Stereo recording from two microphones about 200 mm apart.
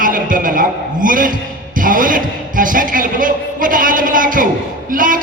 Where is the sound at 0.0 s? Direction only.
45° right (ahead or behind).